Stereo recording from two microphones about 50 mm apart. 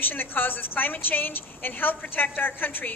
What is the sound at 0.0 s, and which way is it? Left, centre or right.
A woman's voice, left.